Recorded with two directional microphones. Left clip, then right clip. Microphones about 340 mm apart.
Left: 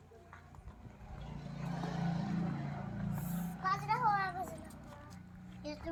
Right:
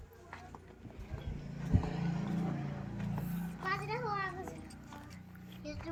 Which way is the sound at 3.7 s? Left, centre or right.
Centre.